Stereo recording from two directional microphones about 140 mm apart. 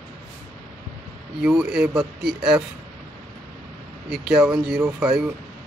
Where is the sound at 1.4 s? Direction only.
5° right (ahead or behind).